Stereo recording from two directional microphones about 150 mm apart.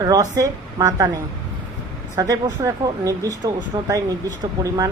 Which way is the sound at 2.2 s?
20° right (ahead or behind).